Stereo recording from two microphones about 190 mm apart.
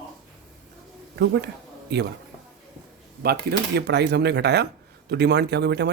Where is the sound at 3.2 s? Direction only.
55° right (ahead or behind).